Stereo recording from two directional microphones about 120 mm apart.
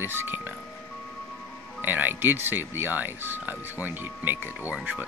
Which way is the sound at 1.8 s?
15° right (ahead or behind).